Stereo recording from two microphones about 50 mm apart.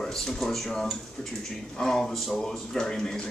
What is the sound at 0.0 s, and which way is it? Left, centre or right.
Speech, centre.